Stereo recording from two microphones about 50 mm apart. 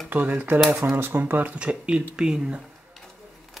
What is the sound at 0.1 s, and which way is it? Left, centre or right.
Speech, right.